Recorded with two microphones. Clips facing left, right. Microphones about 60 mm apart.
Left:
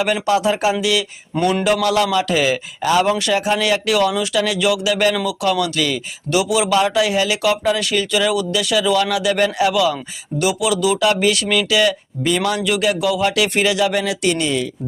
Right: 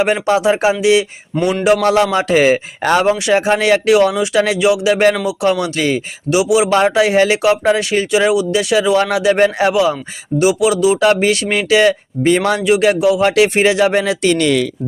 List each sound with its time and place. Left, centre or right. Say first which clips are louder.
0.0 s speech: right 3 dB; right
3.0 s speech: right 4 dB; right
6.3 s speech: right 4 dB; right
6.7 s speech: right 4 dB; right